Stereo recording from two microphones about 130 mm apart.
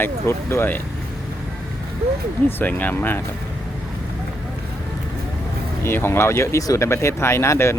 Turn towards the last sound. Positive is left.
turn(degrees=20)  # may be behind; listen again after turning